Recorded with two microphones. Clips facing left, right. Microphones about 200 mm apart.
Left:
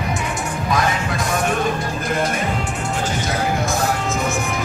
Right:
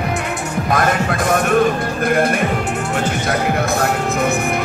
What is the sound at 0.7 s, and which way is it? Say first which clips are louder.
Music: right 4 dB; 55° right (ahead or behind).